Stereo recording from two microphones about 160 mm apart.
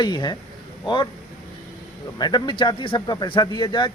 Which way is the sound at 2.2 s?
30° left (ahead or behind).